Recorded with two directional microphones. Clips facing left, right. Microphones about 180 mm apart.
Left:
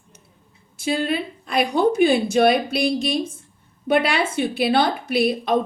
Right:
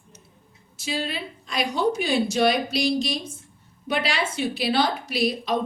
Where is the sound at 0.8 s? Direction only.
55° left (ahead or behind).